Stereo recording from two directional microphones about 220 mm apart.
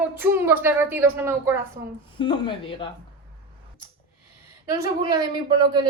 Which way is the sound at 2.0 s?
20° left (ahead or behind).